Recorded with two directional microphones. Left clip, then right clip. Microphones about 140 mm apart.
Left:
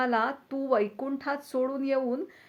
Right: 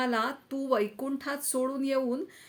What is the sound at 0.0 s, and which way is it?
Speech, 20° right (ahead or behind).